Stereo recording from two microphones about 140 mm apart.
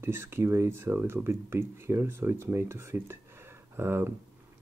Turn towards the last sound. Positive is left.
turn(degrees=-15)  # may be behind; listen again after turning